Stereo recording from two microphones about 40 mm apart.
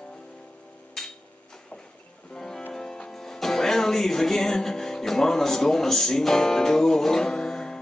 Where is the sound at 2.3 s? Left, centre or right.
Centre.